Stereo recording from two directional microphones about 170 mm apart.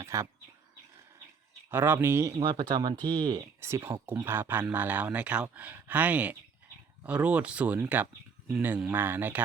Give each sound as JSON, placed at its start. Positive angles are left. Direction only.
{"t": 0.0, "sound": "bird", "side_deg": -15}
{"t": 1.7, "sound": "speech", "side_deg": -15}
{"t": 3.6, "sound": "speech", "side_deg": -15}